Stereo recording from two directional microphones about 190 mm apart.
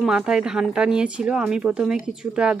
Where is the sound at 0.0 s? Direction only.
5° right (ahead or behind).